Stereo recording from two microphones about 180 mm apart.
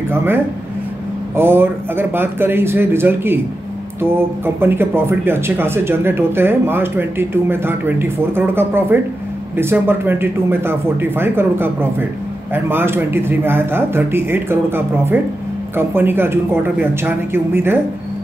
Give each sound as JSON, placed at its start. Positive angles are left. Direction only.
{"t": 0.1, "sound": "speech", "side_deg": -10}
{"t": 4.6, "sound": "speech", "side_deg": -10}